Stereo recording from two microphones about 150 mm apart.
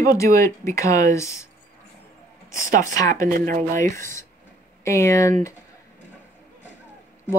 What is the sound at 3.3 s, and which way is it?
Speech, 65° right (ahead or behind).